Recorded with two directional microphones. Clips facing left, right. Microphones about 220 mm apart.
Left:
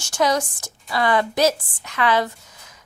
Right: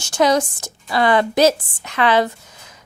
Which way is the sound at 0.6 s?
70° right (ahead or behind).